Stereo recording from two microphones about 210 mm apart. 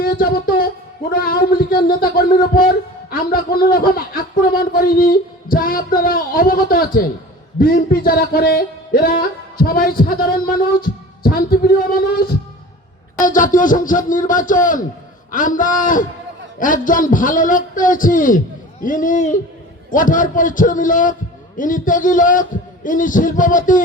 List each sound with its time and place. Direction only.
0.0 s a man's voice: 45° left (ahead or behind)
13.2 s a man's voice: 40° left (ahead or behind)